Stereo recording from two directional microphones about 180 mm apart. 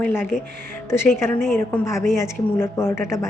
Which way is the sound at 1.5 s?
15° left (ahead or behind).